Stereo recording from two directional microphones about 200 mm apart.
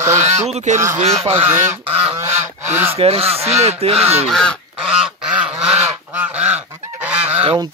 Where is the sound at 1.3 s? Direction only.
10° right (ahead or behind).